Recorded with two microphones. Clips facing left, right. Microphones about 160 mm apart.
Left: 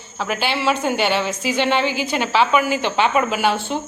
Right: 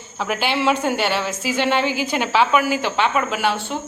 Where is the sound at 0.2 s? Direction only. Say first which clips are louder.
Right 1 dB; 10° right (ahead or behind).